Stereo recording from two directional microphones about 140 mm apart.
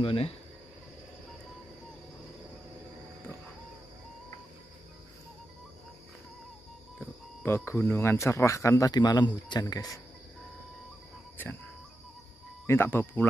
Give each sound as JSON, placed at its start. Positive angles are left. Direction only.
{"t": 0.0, "sound": "speech", "side_deg": 40}
{"t": 7.4, "sound": "speech", "side_deg": 15}
{"t": 11.4, "sound": "speech", "side_deg": 15}
{"t": 12.6, "sound": "speech", "side_deg": 15}